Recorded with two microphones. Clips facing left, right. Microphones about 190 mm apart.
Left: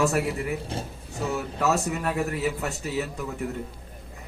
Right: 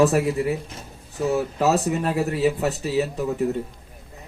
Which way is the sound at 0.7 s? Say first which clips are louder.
Left 7 dB; 30° left (ahead or behind).